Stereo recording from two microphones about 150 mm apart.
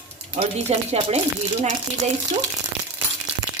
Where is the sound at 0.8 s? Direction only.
45° right (ahead or behind).